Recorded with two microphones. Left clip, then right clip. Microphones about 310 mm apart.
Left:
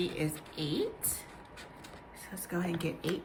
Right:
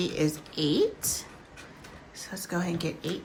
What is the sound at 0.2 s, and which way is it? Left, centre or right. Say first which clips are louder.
Speech: right 8 dB; centre.